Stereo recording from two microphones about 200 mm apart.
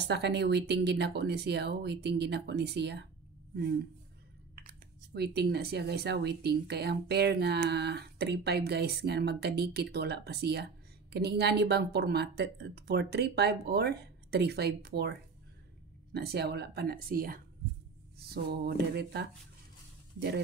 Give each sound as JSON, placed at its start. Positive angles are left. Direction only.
{"t": 0.0, "sound": "speech", "side_deg": -55}
{"t": 4.6, "sound": "speech", "side_deg": -55}